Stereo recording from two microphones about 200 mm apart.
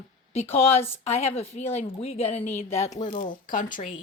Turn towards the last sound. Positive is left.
turn(degrees=40)  # may be behind; listen again after turning